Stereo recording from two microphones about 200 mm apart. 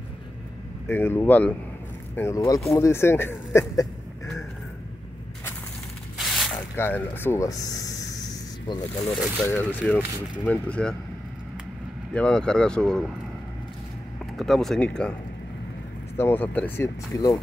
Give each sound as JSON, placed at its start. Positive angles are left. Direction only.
{"t": 0.8, "sound": "speech", "side_deg": 10}
{"t": 6.1, "sound": "a sound", "side_deg": 0}
{"t": 6.8, "sound": "speech", "side_deg": 10}
{"t": 9.0, "sound": "speech", "side_deg": 5}
{"t": 12.1, "sound": "speech", "side_deg": 5}
{"t": 14.3, "sound": "speech", "side_deg": 0}
{"t": 16.2, "sound": "speech", "side_deg": 10}